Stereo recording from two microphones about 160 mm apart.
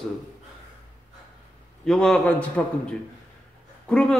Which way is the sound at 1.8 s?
5° left (ahead or behind).